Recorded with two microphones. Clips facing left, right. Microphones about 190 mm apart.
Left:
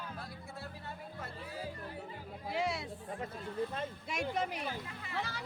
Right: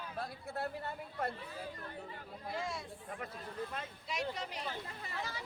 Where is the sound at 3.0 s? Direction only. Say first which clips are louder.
Left 3 dB; 25° left (ahead or behind).